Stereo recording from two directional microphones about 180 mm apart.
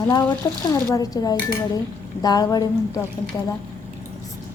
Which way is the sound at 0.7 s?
20° left (ahead or behind).